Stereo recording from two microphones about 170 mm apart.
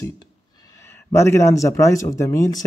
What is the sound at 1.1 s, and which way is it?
Speech, 15° left (ahead or behind).